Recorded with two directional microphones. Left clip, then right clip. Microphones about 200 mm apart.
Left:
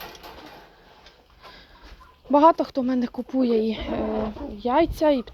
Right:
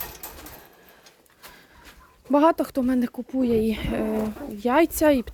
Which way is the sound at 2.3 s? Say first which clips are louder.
Left 3 dB; 30° right (ahead or behind).